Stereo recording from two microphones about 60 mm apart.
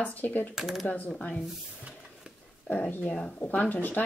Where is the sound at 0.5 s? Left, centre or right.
Centre.